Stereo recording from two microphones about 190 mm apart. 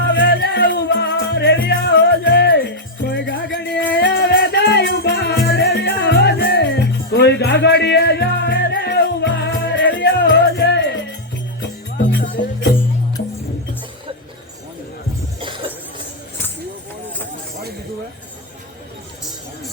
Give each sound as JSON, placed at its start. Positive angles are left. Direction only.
{"t": 0.0, "sound": "music", "side_deg": 65}